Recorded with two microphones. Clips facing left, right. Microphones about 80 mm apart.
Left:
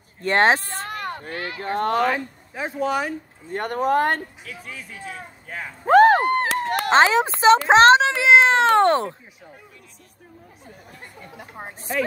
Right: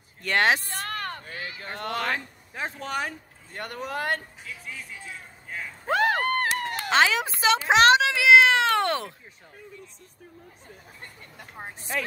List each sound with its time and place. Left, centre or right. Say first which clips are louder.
0.2 s a child's voice: left 5 dB; left
0.8 s a sound: left 3 dB; centre
1.3 s speech: left 6 dB; left
1.6 s speech: left 11 dB; left
2.0 s speech: left 6 dB; centre
3.5 s speech: left 12 dB; left
4.9 s speech: left 6 dB; left
6.1 s a sound: left 5 dB; left
6.9 s a child's voice: left 6 dB; left
11.3 s a woman's voice: left 3 dB; centre